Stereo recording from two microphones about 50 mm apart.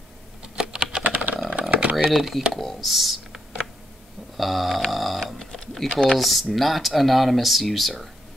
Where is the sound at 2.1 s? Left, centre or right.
Centre.